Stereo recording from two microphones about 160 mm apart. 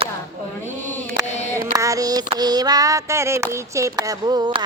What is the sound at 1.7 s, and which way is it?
Child singing, 20° right (ahead or behind).